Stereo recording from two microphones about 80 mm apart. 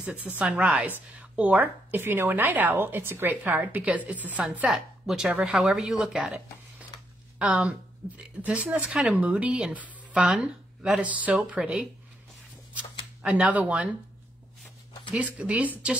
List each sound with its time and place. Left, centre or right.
0.0 s a woman's voice: centre
8.7 s a woman's voice: centre
13.2 s a woman's voice: centre
15.1 s a woman's voice: centre